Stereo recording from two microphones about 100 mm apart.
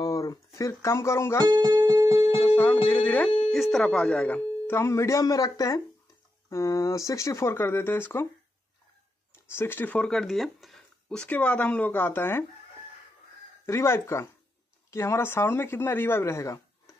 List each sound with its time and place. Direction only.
0.0 s a sound: 40° left (ahead or behind)
1.5 s speech: 45° right (ahead or behind)
2.0 s music: 30° right (ahead or behind)
2.4 s speech: 20° left (ahead or behind)
3.3 s a sound: 60° left (ahead or behind)
3.5 s speech: centre (ahead or behind); by 8.3 s 20° left (ahead or behind)
9.3 s speech: 25° left (ahead or behind); by 10.8 s centre (ahead or behind)
11.1 s speech: 15° left (ahead or behind)
13.7 s speech: 25° left (ahead or behind)